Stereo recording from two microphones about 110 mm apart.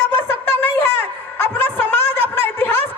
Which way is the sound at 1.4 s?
20° left (ahead or behind).